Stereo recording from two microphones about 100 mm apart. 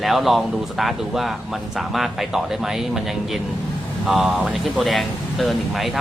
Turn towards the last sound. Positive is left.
turn(degrees=0)  # may be behind; listen again after turning